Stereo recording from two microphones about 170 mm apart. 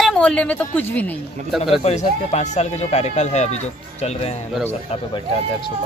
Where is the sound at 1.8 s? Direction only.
40° left (ahead or behind).